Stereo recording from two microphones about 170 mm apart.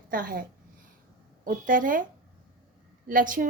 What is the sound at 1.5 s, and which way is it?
Speech, 50° right (ahead or behind).